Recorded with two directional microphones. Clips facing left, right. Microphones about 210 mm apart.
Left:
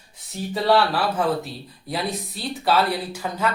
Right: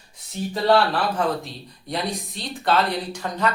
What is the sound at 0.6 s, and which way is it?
Speech, 5° left (ahead or behind).